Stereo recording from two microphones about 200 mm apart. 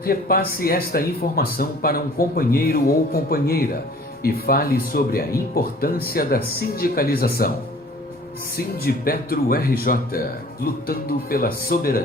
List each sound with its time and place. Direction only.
0.0 s a man's voice: 45° left (ahead or behind)
8.5 s a man's voice: 50° left (ahead or behind)